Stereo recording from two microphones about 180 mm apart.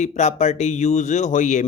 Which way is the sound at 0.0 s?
40° left (ahead or behind).